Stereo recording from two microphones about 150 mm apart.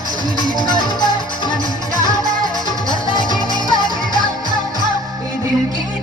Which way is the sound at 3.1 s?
30° left (ahead or behind).